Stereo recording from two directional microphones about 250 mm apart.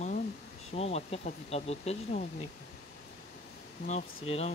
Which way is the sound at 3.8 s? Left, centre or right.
Left.